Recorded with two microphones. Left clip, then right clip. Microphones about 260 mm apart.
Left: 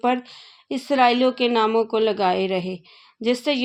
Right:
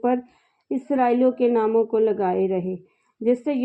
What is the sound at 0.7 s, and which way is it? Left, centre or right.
A man's voice, left.